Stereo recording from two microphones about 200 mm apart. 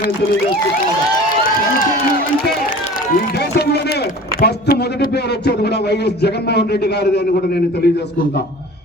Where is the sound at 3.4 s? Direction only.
55° left (ahead or behind).